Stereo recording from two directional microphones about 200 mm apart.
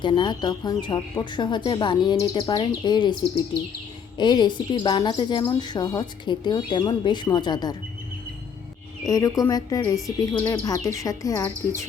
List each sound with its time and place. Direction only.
0.0 s a woman's voice: 25° left (ahead or behind)
4.2 s a woman's voice: 20° left (ahead or behind)
9.0 s speech: 15° left (ahead or behind)